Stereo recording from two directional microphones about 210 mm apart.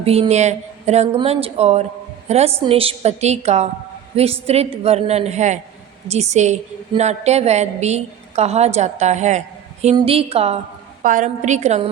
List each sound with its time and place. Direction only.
0.0 s a woman's voice: 30° right (ahead or behind)